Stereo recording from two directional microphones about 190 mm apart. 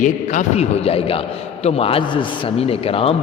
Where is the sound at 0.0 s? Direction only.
40° left (ahead or behind).